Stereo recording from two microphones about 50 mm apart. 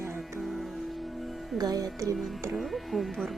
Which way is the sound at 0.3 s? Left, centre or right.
Centre.